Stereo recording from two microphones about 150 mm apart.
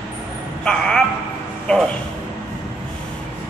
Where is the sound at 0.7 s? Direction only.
5° left (ahead or behind).